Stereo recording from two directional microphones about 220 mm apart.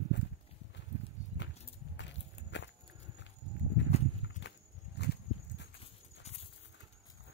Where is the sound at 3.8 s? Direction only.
55° left (ahead or behind).